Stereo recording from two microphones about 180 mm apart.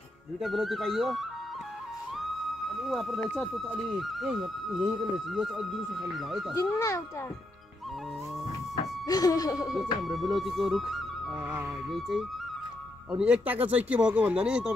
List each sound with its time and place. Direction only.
0.4 s speech: centre (ahead or behind)
2.7 s speech: centre (ahead or behind)
6.5 s a child's voice: 20° left (ahead or behind)
9.0 s speech: 20° left (ahead or behind)
10.0 s speech: centre (ahead or behind)